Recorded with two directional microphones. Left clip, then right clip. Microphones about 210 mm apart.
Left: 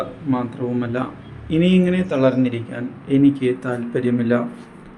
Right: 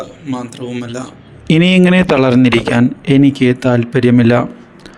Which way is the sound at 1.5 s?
50° right (ahead or behind).